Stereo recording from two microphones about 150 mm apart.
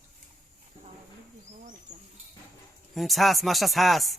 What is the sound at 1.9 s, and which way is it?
Speech, 50° right (ahead or behind).